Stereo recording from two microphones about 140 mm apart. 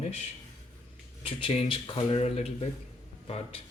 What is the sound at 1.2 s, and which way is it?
Speech, 40° left (ahead or behind).